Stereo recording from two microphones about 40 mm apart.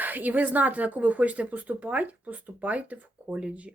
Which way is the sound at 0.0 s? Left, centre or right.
Right.